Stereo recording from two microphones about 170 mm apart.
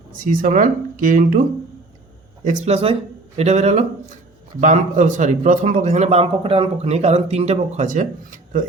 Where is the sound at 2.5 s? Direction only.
40° right (ahead or behind).